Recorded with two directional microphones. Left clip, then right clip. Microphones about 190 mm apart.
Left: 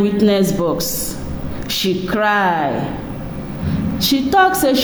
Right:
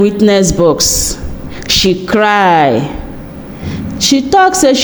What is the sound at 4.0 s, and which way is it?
Speech, 25° right (ahead or behind).